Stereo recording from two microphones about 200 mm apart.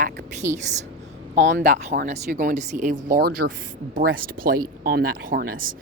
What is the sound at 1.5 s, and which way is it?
Speech, 45° right (ahead or behind).